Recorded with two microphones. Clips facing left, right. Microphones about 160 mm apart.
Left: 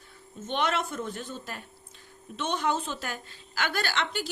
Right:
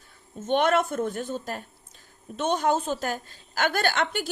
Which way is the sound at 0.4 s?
50° right (ahead or behind).